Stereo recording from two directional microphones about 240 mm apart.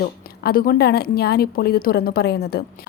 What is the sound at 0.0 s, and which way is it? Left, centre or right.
A woman's voice, left.